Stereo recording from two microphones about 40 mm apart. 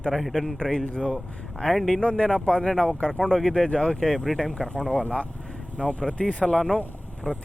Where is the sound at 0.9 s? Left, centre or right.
Centre.